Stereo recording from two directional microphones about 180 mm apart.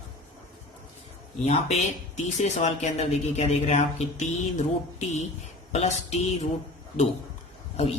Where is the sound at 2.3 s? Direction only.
40° left (ahead or behind).